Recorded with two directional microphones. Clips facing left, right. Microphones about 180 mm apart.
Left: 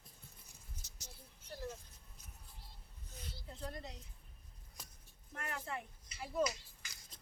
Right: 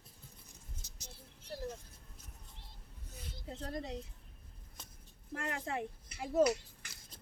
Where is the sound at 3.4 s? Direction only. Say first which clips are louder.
Right 6 dB; 75° right (ahead or behind).